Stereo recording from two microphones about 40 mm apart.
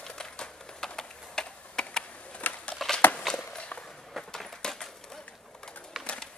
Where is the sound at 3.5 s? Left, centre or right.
Left.